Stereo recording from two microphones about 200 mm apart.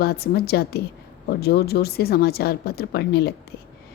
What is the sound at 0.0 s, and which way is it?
A woman's voice, 50° left (ahead or behind).